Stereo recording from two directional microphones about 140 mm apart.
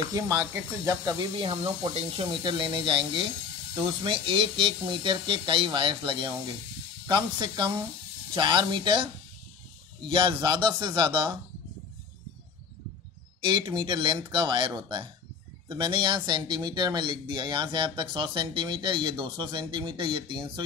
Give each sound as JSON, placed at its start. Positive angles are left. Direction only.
{"t": 0.1, "sound": "speech", "side_deg": -25}
{"t": 1.3, "sound": "speech", "side_deg": -35}
{"t": 13.4, "sound": "speech", "side_deg": -35}